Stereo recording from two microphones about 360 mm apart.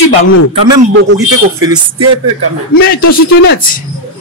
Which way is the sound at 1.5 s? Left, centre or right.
Centre.